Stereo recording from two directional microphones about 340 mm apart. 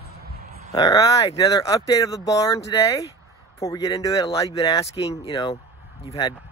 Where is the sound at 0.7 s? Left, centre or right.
Centre.